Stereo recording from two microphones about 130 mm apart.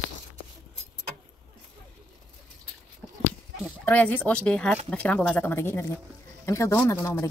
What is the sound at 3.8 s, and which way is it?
Speech, 10° left (ahead or behind).